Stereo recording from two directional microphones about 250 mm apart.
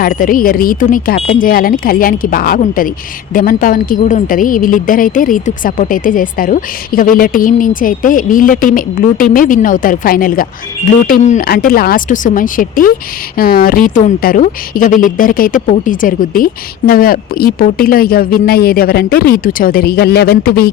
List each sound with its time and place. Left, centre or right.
0.0 s a woman's voice: left